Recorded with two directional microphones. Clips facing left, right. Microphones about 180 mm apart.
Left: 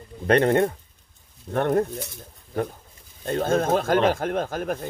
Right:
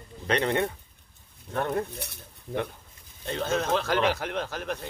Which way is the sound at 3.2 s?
55° left (ahead or behind).